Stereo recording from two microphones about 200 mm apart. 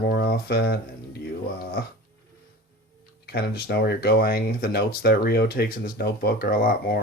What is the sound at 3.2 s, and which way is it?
Speech, 50° left (ahead or behind).